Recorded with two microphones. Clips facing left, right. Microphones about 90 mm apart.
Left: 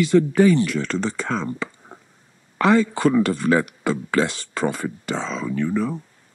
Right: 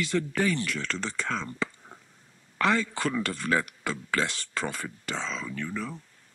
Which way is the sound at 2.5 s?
15° left (ahead or behind).